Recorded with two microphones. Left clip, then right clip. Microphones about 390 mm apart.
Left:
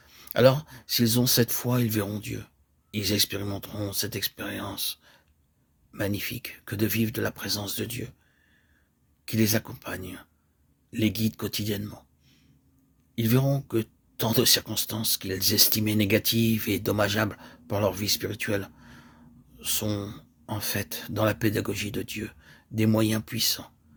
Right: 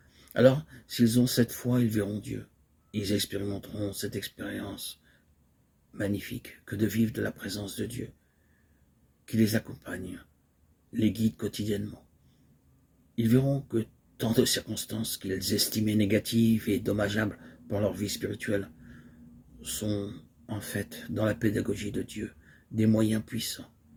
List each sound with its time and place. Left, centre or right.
0.1 s a sound: left
1.0 s speech: left
5.9 s speech: left
9.2 s speech: left
13.1 s speech: left